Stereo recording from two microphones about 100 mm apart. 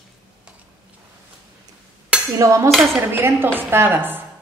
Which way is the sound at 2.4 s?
30° right (ahead or behind).